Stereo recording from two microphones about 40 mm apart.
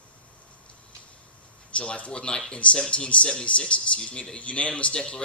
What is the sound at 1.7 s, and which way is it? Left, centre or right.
Speech, left.